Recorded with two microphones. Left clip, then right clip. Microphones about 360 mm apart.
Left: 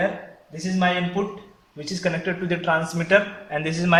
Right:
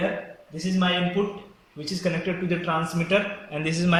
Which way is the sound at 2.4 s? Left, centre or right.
Left.